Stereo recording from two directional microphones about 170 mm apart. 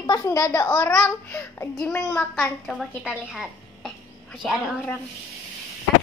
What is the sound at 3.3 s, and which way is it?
Music, centre (ahead or behind).